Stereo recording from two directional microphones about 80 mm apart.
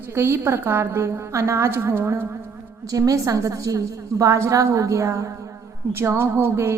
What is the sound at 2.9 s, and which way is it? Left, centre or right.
A woman's voice, right.